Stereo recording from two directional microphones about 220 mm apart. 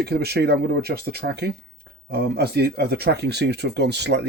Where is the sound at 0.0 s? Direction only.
45° right (ahead or behind).